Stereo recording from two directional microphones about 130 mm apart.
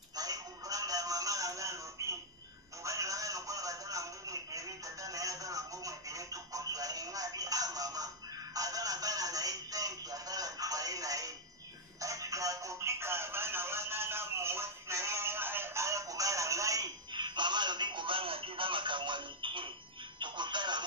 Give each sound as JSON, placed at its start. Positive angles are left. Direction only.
{"t": 0.1, "sound": "a sound", "side_deg": -30}
{"t": 8.5, "sound": "telephone", "side_deg": -25}
{"t": 20.2, "sound": "music", "side_deg": -35}